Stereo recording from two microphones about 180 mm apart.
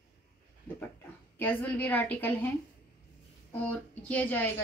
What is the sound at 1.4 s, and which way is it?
A woman's voice, 10° left (ahead or behind).